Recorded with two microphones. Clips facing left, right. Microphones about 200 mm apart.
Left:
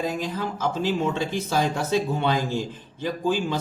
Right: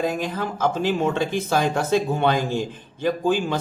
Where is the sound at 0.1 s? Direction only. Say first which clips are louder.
Right 2 dB; 55° right (ahead or behind).